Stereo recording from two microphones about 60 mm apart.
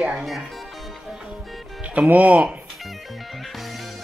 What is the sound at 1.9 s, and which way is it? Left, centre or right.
Speech, right.